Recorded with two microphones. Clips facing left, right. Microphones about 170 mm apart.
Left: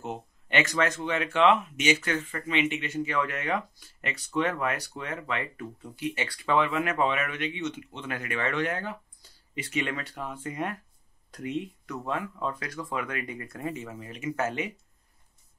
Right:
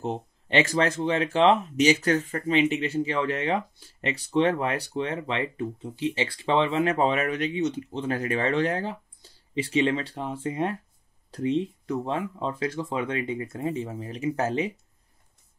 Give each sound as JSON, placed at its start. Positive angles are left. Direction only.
{"t": 0.0, "sound": "speech", "side_deg": -35}